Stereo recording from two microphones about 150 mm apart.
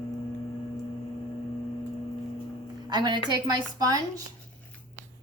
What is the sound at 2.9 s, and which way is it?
A woman's voice, 30° right (ahead or behind).